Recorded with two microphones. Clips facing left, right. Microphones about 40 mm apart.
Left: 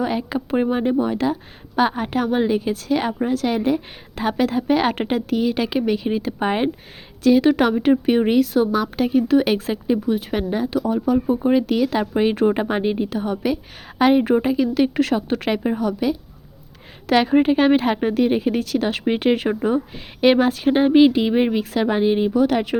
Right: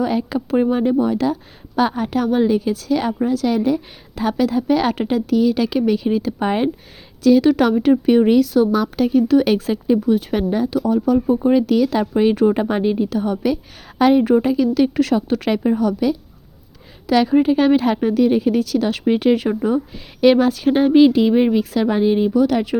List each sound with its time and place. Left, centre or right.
0.0 s a woman's voice: left
7.2 s a woman's voice: left; by 8.9 s centre
9.0 s speech: left
9.8 s speech: centre; by 15.1 s left
15.4 s speech: centre
17.1 s a woman's voice: left
21.6 s a woman's voice: left
21.8 s speech: left
22.3 s a woman's voice: left